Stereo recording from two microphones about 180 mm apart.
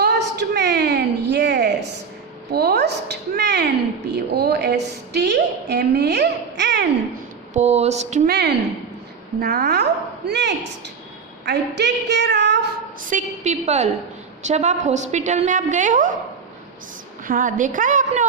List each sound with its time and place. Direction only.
0.0 s a sound: 70° right (ahead or behind)
4.4 s a woman's voice: 65° right (ahead or behind)
7.5 s a woman's voice: 40° right (ahead or behind)
8.3 s a woman's voice: 65° right (ahead or behind)
9.4 s a woman's voice: 55° right (ahead or behind)
10.2 s a woman's voice: 70° right (ahead or behind)
13.0 s a woman's voice: 45° right (ahead or behind)
17.2 s a woman's voice: 50° right (ahead or behind)